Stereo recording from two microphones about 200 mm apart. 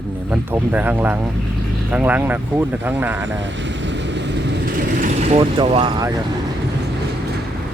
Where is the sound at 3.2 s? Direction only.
65° right (ahead or behind); by 5.4 s 40° right (ahead or behind).